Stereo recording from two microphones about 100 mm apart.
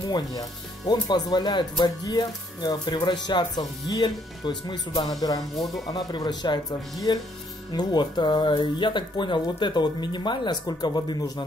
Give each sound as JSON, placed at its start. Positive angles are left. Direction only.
{"t": 0.1, "sound": "speech", "side_deg": 40}